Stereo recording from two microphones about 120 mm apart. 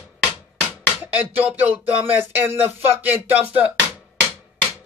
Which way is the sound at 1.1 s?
15° right (ahead or behind).